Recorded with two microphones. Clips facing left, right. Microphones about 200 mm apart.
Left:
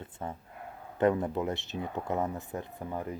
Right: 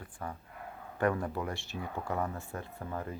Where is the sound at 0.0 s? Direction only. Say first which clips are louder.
Left 3 dB; 25° left (ahead or behind).